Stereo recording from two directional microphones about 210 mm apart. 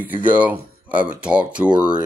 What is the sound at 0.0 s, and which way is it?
Speech, 10° right (ahead or behind).